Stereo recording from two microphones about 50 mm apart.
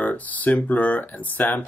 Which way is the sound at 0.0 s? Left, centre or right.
Left.